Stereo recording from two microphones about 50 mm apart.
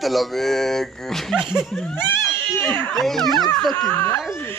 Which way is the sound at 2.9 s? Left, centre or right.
Centre.